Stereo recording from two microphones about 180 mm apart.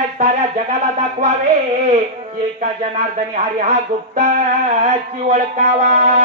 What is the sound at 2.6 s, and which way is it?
Music, 40° right (ahead or behind).